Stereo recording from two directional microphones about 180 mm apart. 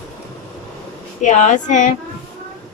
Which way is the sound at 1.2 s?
40° left (ahead or behind).